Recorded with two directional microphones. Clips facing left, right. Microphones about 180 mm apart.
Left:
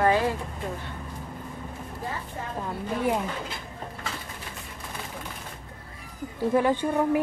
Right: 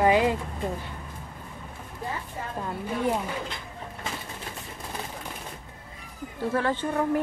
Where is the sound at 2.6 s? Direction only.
Centre (ahead or behind).